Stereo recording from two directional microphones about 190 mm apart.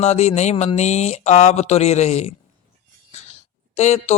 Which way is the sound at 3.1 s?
35° left (ahead or behind).